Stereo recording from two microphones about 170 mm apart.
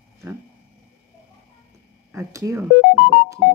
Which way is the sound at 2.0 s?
20° right (ahead or behind).